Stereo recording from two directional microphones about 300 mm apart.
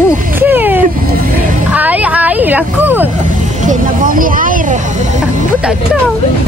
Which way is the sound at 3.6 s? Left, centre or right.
Right.